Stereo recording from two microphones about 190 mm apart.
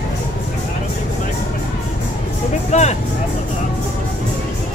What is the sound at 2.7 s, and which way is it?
Speech, 35° left (ahead or behind).